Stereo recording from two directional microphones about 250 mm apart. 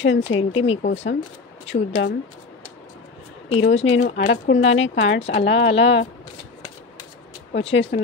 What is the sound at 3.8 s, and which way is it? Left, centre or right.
Speech, left.